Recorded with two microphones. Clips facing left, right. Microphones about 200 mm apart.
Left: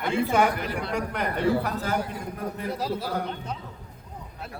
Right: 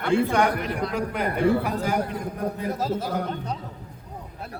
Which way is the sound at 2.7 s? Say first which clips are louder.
Right 2 dB; 45° right (ahead or behind).